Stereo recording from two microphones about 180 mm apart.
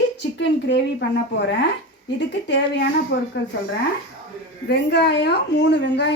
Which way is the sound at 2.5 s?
75° left (ahead or behind).